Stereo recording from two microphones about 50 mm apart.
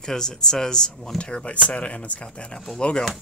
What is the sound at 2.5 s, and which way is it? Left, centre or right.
Speech, centre.